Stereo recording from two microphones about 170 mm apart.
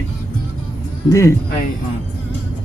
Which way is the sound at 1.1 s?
20° left (ahead or behind).